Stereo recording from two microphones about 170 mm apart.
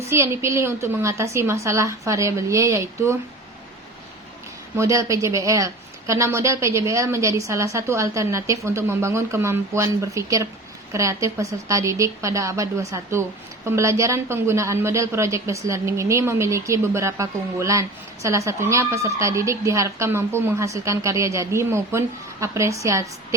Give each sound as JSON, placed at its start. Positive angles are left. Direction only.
{"t": 0.0, "sound": "a woman's voice", "side_deg": -15}
{"t": 4.8, "sound": "a woman's voice", "side_deg": -20}